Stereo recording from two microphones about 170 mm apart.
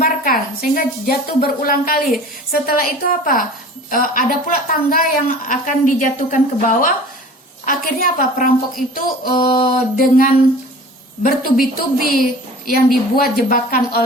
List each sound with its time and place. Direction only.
0.0 s a woman's voice: 60° left (ahead or behind)